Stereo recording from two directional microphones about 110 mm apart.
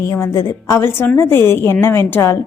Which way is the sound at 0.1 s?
30° left (ahead or behind).